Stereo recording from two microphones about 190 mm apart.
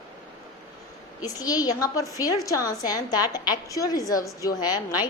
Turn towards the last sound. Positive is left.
turn(degrees=20)  # may be behind; listen again after turning